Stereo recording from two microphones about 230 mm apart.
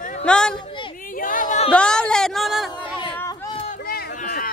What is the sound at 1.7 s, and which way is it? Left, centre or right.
Chatter, centre.